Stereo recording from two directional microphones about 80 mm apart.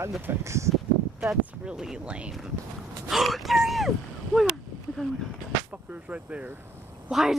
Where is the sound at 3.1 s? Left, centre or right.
Centre.